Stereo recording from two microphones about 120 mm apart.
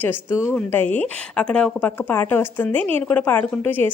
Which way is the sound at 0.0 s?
15° left (ahead or behind).